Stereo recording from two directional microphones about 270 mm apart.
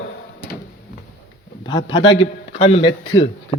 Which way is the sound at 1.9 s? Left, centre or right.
Centre.